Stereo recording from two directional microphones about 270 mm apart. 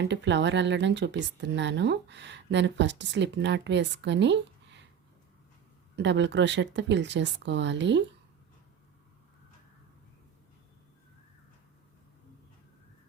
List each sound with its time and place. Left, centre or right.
0.0 s speech: right
6.0 s speech: right